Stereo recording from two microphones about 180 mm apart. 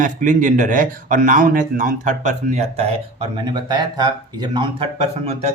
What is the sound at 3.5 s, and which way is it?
Speech, 25° right (ahead or behind).